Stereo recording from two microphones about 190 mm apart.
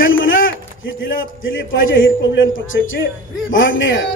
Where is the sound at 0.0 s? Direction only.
90° left.